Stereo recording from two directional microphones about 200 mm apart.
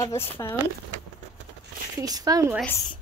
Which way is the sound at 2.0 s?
20° right (ahead or behind).